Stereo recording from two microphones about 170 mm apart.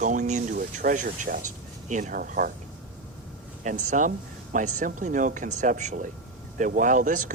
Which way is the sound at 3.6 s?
45° right (ahead or behind).